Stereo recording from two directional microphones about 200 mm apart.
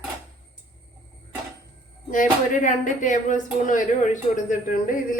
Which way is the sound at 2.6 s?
40° left (ahead or behind).